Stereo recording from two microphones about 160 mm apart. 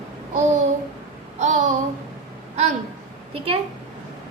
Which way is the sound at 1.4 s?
50° right (ahead or behind).